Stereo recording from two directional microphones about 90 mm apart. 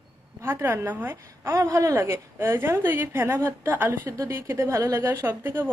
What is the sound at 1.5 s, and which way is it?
A woman's voice, 35° right (ahead or behind).